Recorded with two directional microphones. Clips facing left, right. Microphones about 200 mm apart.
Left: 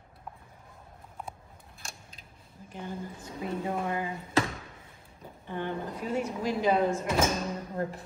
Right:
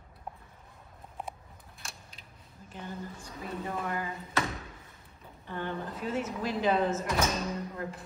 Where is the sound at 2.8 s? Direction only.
20° left (ahead or behind).